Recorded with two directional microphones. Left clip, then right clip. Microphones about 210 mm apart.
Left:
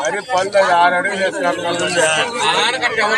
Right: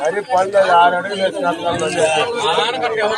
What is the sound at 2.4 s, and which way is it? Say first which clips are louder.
Speech: left 1 dB; 35° right (ahead or behind).